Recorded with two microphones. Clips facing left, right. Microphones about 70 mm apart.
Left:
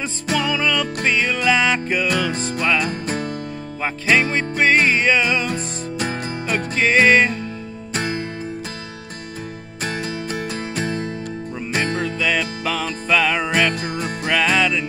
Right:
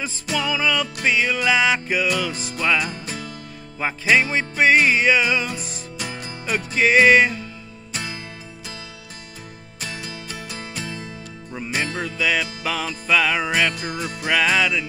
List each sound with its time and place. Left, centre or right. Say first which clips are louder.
0.4 s music: left 1 dB; centre
2.9 s music: left 7 dB; left
3.8 s music: even; centre
5.5 s music: left 6 dB; left
6.4 s music: right 1 dB; centre
7.9 s music: left 7 dB; left
9.8 s music: left 8 dB; left
12.0 s music: left 2 dB; centre
13.7 s music: left 3 dB; left
14.2 s music: left 1 dB; centre